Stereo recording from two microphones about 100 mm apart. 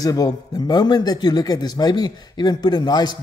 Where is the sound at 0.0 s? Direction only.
40° left (ahead or behind).